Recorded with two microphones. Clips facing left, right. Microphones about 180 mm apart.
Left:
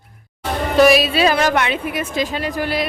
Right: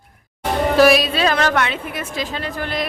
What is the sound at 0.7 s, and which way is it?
A woman's voice, centre (ahead or behind).